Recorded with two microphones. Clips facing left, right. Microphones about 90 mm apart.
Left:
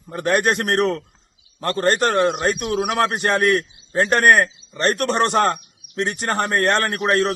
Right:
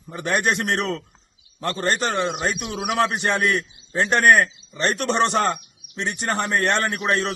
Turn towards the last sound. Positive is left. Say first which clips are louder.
# left 4 dB
turn(degrees=40)  # may be behind; listen again after turning